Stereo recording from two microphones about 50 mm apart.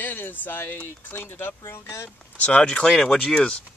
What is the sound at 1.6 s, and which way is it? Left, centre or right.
Speech, left.